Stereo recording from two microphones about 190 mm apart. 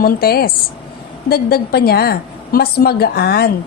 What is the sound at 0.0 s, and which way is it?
A woman's voice, 50° left (ahead or behind).